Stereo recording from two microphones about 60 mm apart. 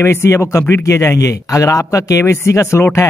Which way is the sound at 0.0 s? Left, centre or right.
Left.